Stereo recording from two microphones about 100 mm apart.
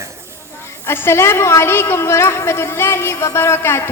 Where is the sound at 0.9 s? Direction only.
25° left (ahead or behind).